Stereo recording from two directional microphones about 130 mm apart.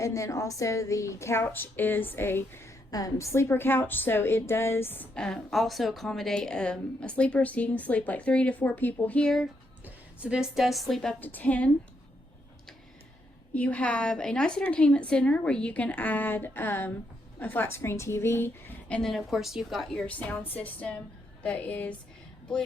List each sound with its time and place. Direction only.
0.0 s a woman's voice: 25° left (ahead or behind); by 9.5 s 5° left (ahead or behind)
9.8 s a woman's voice: 10° right (ahead or behind); by 11.7 s 10° left (ahead or behind)
13.5 s a woman's voice: 10° left (ahead or behind)